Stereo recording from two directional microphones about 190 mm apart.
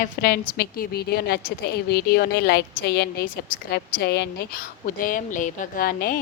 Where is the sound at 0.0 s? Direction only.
50° left (ahead or behind).